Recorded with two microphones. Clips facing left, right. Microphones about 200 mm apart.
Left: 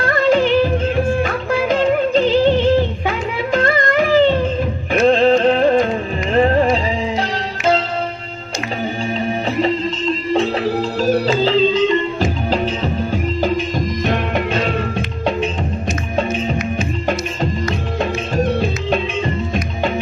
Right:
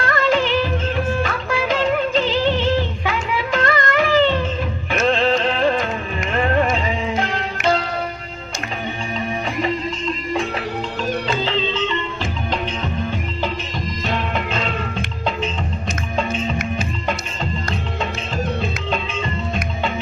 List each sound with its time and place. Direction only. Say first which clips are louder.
0.3 s music of bollywood: left 6 dB; 45° left (ahead or behind)
3.1 s music: left 3 dB; 40° left (ahead or behind)
6.3 s music: left 5 dB; 35° left (ahead or behind)
10.3 s music: left 8 dB; 30° left (ahead or behind)
14.0 s music: left 3 dB; 50° left (ahead or behind)
14.6 s music: left 5 dB; 65° left (ahead or behind)